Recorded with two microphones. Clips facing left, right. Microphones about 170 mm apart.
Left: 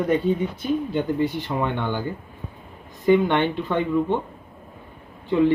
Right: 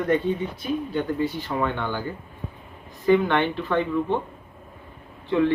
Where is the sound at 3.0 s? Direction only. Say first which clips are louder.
Left 1 dB; 20° left (ahead or behind).